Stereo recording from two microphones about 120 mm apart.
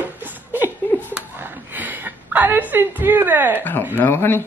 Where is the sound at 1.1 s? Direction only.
15° right (ahead or behind).